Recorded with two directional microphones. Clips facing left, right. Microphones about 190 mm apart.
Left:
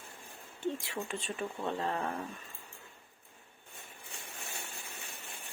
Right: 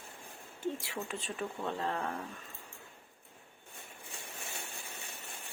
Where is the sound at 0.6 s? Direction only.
5° right (ahead or behind).